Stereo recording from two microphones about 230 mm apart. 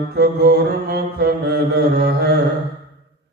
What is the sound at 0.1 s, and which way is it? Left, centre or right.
Mantra, right.